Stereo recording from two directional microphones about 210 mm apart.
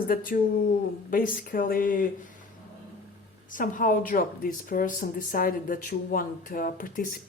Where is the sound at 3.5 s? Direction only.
40° left (ahead or behind).